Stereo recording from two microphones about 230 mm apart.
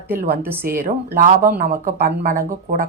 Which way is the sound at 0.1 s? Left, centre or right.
Right.